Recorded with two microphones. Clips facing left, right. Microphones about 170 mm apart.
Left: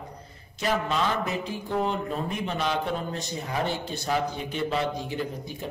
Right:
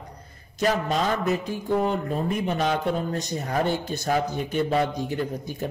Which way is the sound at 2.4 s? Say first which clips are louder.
Right 2 dB; 45° right (ahead or behind).